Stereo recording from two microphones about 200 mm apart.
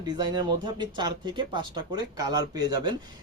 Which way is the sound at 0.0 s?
20° right (ahead or behind).